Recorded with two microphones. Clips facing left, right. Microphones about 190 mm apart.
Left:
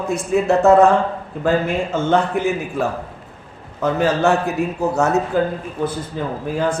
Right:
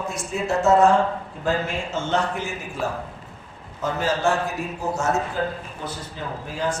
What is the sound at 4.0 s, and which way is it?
A man's voice, 65° left (ahead or behind).